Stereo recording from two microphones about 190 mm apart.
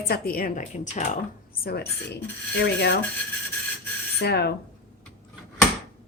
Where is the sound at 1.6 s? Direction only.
55° left (ahead or behind).